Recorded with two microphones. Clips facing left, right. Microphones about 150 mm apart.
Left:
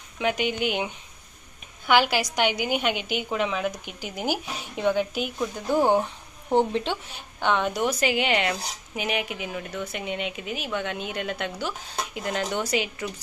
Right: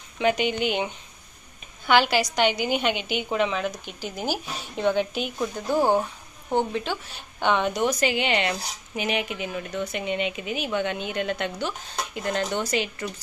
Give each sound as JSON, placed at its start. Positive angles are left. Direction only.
{"t": 0.2, "sound": "speech", "side_deg": 5}
{"t": 1.9, "sound": "a woman's voice", "side_deg": 10}
{"t": 5.8, "sound": "speech", "side_deg": -10}
{"t": 6.7, "sound": "speech", "side_deg": 25}
{"t": 7.3, "sound": "speech", "side_deg": 0}